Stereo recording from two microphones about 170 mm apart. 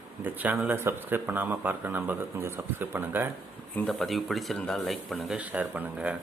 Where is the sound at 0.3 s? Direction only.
10° right (ahead or behind).